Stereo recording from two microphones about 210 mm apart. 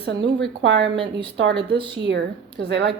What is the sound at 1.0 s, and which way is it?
Speech, 25° right (ahead or behind).